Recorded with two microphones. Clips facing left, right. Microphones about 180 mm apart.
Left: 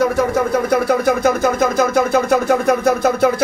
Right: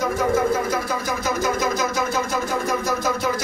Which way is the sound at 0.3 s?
65° left (ahead or behind).